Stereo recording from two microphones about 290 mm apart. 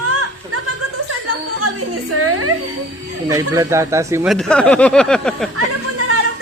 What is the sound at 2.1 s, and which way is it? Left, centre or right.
Speech, right.